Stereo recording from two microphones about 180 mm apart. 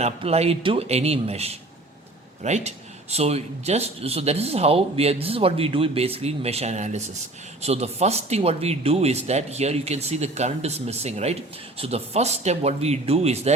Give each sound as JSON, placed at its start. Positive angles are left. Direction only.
{"t": 0.0, "sound": "speech", "side_deg": -35}